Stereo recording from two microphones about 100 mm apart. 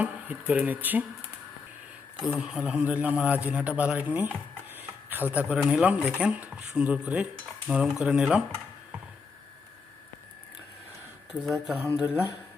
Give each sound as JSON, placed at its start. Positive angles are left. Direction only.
{"t": 0.0, "sound": "a man's voice", "side_deg": -15}
{"t": 2.3, "sound": "a man's voice", "side_deg": -10}
{"t": 11.3, "sound": "speech", "side_deg": -5}